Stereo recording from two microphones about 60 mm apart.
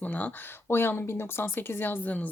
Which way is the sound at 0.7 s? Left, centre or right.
Left.